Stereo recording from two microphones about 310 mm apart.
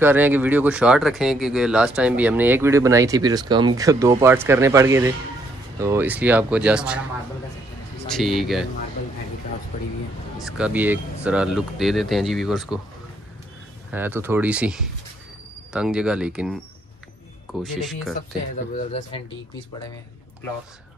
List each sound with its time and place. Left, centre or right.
0.0 s speech: centre
8.1 s speech: centre
10.4 s speech: centre
13.9 s speech: centre
18.8 s speech: left